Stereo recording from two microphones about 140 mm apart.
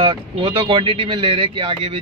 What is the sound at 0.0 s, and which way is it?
Speech, 35° right (ahead or behind).